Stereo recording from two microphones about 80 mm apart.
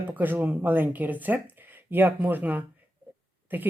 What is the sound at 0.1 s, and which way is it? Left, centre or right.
Speech, right.